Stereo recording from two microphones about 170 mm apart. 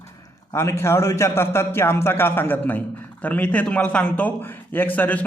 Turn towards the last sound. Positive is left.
turn(degrees=10)  # may be behind; listen again after turning